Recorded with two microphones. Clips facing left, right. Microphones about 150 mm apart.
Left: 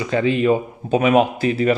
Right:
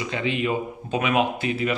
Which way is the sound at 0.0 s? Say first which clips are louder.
Left 8 dB; 40° left (ahead or behind).